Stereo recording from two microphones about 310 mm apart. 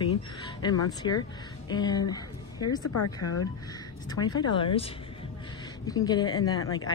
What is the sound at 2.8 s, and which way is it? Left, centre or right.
Speech, left.